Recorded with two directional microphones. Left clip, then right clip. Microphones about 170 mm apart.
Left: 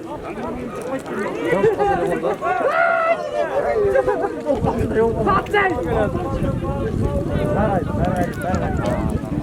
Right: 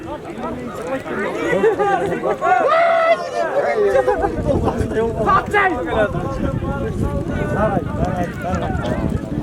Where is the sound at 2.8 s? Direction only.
20° right (ahead or behind).